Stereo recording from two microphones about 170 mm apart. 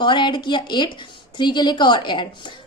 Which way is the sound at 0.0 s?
25° left (ahead or behind).